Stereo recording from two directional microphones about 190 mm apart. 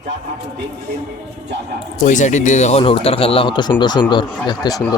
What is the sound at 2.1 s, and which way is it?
Speech, 40° left (ahead or behind).